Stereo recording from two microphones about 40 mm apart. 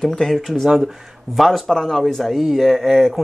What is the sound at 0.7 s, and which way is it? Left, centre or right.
Speech, centre.